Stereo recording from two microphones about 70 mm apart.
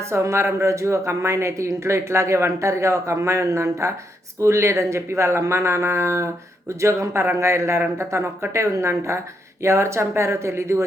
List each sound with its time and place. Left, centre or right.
0.1 s speech: right